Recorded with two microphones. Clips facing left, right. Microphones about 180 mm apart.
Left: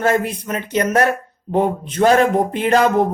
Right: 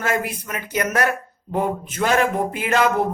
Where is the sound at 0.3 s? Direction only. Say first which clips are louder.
Left 6 dB; 30° left (ahead or behind).